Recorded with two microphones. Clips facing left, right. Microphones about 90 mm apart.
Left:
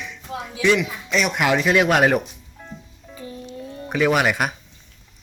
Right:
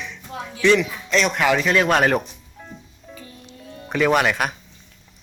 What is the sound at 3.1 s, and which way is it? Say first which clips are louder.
Music: left 9 dB; 25° left (ahead or behind).